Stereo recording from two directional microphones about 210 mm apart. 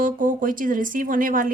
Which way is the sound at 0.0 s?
40° right (ahead or behind).